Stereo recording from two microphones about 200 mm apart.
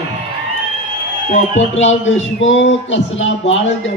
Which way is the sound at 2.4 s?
70° left (ahead or behind).